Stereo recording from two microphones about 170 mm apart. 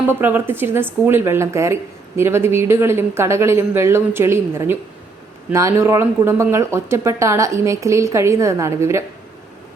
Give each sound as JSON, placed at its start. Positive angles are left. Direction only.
{"t": 0.1, "sound": "speech", "side_deg": -10}